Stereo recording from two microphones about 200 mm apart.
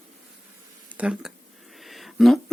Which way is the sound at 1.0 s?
5° right (ahead or behind).